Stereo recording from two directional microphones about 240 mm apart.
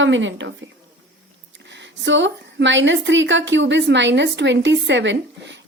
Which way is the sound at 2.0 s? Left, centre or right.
Right.